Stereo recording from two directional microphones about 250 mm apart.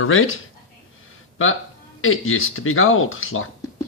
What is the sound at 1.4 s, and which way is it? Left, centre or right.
Speech, left.